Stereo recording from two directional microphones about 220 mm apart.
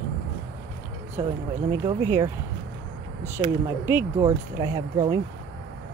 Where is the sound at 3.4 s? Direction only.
10° right (ahead or behind).